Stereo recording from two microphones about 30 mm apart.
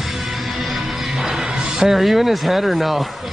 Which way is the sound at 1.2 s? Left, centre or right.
Centre.